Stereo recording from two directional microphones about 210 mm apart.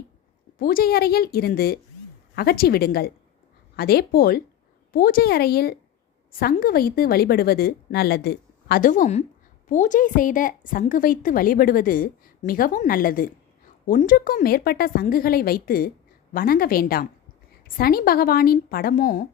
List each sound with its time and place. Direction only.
0.6 s a woman's voice: 45° left (ahead or behind)